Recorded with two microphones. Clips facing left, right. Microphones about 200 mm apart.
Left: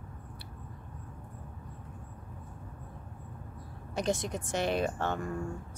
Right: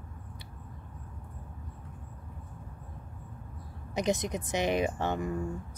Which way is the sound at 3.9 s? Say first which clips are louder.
Right 2 dB; 20° right (ahead or behind).